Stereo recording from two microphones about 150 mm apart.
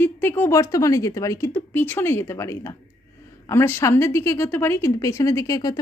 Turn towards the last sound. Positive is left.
turn(degrees=25)  # may be behind; listen again after turning